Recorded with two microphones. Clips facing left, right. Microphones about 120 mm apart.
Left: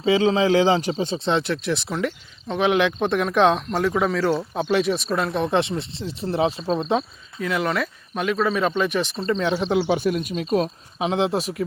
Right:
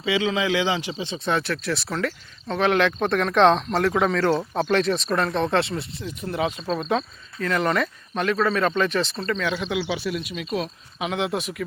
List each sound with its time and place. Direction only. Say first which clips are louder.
0.0 s speech: left 5 dB; 40° left (ahead or behind)
1.2 s speech: right 2 dB; 20° left (ahead or behind)
7.3 s speech: right 1 dB; 10° left (ahead or behind)
9.2 s speech: left 4 dB; 30° left (ahead or behind)